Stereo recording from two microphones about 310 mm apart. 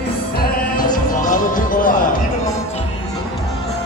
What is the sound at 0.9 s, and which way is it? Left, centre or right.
Music, left.